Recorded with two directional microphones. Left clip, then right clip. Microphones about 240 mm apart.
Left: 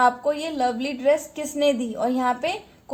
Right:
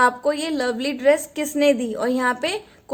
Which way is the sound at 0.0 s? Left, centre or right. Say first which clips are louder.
Right 2 dB; right.